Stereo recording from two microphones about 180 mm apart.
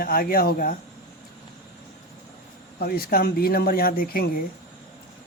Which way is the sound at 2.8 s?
55° left (ahead or behind).